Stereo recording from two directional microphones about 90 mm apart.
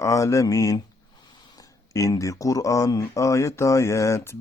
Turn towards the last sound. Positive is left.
turn(degrees=30)  # may be behind; listen again after turning